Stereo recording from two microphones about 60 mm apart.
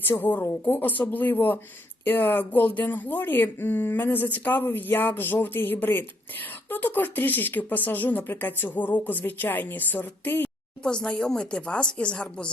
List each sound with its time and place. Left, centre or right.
0.2 s speech: left
10.8 s speech: centre